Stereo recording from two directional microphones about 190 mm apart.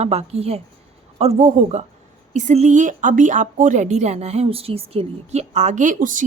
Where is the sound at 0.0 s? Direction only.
35° right (ahead or behind).